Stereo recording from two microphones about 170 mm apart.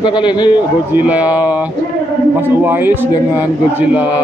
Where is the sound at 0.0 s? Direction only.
25° left (ahead or behind).